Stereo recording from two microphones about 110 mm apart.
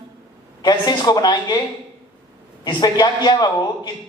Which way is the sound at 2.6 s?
40° left (ahead or behind).